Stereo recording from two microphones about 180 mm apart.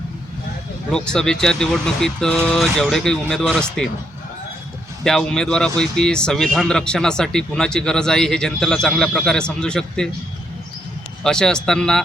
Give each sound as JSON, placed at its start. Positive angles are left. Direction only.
{"t": 0.9, "sound": "speech", "side_deg": 5}
{"t": 5.0, "sound": "speech", "side_deg": 5}
{"t": 11.2, "sound": "speech", "side_deg": 5}